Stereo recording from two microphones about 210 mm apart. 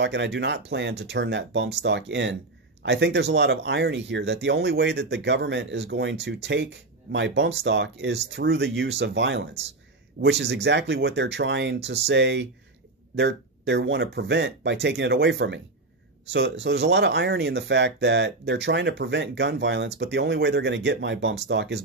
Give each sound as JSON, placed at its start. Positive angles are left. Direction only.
{"t": 0.0, "sound": "speech", "side_deg": -55}
{"t": 16.6, "sound": "speech", "side_deg": -55}